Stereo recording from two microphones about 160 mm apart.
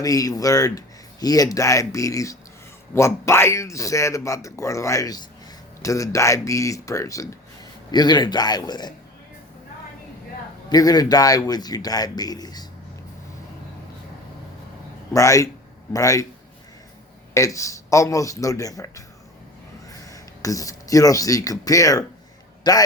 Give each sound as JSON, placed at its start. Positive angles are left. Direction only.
{"t": 0.0, "sound": "speech", "side_deg": 20}
{"t": 10.7, "sound": "speech", "side_deg": 25}
{"t": 15.1, "sound": "speech", "side_deg": 20}
{"t": 17.3, "sound": "speech", "side_deg": 20}